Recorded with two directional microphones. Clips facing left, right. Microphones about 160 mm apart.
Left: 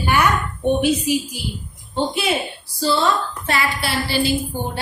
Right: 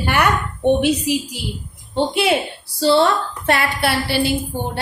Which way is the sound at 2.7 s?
70° right (ahead or behind).